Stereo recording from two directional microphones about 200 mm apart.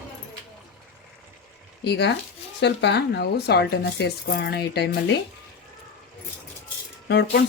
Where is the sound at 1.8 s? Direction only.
55° left (ahead or behind).